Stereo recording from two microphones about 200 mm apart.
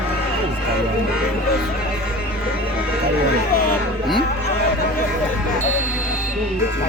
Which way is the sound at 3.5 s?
45° left (ahead or behind).